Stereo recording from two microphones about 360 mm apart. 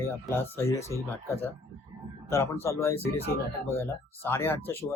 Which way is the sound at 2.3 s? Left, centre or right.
Centre.